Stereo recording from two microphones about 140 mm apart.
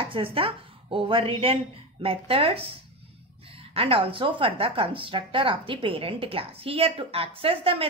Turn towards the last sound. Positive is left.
turn(degrees=-40)  # may be behind; listen again after turning